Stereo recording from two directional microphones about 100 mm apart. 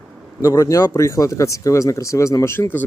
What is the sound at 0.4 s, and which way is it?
Speech, 35° left (ahead or behind).